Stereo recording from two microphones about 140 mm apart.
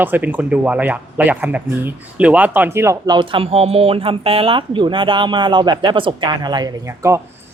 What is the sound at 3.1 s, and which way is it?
Speech, 35° right (ahead or behind).